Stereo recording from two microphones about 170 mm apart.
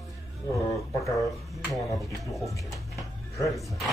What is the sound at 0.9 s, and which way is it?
Speech, 20° left (ahead or behind).